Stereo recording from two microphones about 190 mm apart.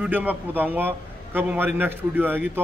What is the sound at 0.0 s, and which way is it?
A man's voice, 10° right (ahead or behind).